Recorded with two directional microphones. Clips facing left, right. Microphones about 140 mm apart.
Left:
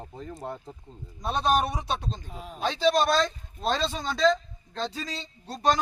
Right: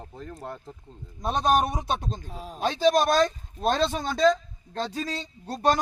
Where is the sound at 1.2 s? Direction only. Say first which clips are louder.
Right 2 dB; 45° right (ahead or behind).